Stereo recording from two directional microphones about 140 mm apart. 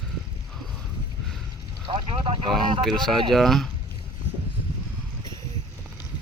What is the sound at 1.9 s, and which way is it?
Speech, 40° right (ahead or behind).